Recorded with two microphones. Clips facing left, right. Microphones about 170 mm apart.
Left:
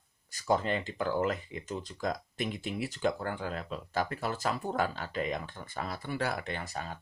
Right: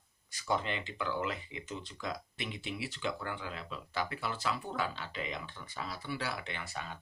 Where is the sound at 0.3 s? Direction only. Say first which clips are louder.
Left 5 dB; 40° left (ahead or behind).